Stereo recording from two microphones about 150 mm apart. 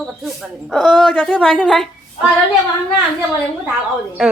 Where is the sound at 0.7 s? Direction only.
Centre (ahead or behind).